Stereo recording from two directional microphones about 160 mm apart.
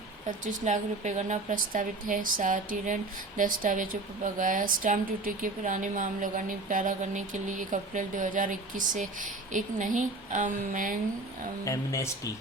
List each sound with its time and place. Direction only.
0.3 s speech: 50° right (ahead or behind)
11.6 s speech: 20° left (ahead or behind)